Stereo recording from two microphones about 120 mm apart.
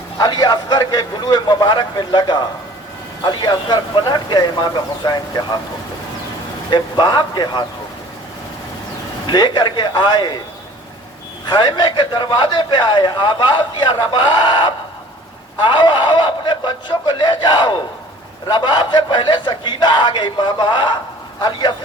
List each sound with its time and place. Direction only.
0.2 s a man's voice: 35° left (ahead or behind)
6.7 s a man's voice: 40° left (ahead or behind)
9.2 s a man's voice: 40° left (ahead or behind)
11.4 s a man's voice: 40° left (ahead or behind)